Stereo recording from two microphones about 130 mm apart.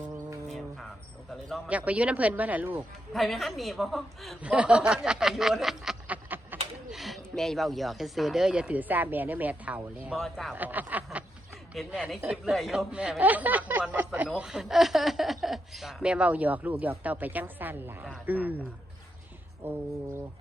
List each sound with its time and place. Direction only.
1.6 s speech: 10° right (ahead or behind)
3.1 s speech: centre (ahead or behind)
6.2 s a sound: 15° right (ahead or behind)
6.9 s a sound: centre (ahead or behind)
7.3 s speech: centre (ahead or behind)
10.2 s speech: centre (ahead or behind)
10.5 s speech: 15° right (ahead or behind)
19.6 s speech: 15° right (ahead or behind)